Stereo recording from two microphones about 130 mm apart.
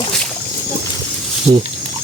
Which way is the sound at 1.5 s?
35° right (ahead or behind).